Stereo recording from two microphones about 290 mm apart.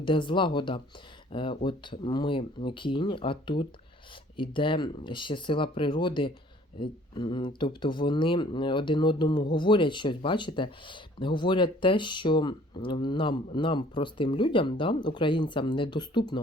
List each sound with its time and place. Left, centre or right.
0.0 s speech: centre